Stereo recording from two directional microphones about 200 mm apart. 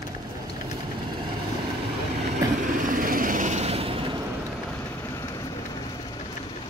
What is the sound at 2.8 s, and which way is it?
Vehicle, 45° right (ahead or behind).